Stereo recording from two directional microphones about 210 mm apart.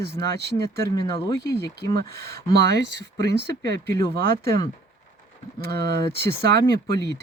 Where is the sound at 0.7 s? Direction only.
20° left (ahead or behind).